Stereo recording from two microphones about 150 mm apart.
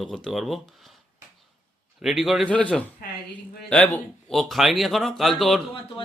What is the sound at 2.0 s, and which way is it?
A man's voice, centre (ahead or behind).